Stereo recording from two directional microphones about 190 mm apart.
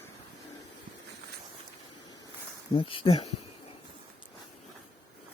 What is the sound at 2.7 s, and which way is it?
Speech, 30° left (ahead or behind).